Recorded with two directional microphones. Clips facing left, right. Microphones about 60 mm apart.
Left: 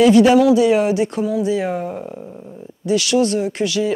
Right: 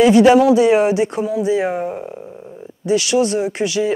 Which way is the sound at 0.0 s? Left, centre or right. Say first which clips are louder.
Right 1 dB; right.